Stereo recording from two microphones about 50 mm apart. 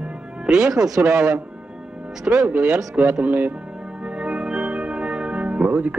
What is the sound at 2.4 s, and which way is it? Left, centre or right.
Speech, right.